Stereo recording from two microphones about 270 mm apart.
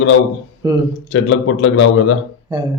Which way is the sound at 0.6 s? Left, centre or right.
Centre.